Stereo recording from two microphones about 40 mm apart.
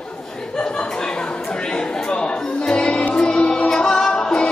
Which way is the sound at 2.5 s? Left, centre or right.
Left.